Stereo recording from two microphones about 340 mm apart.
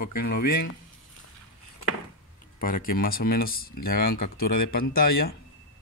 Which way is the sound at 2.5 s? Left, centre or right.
Left.